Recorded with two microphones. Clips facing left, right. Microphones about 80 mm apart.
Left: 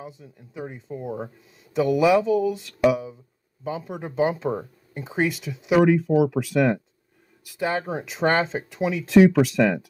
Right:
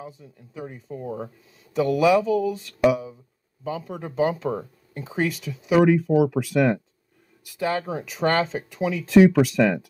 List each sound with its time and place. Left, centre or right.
0.0 s speech: centre
3.6 s speech: centre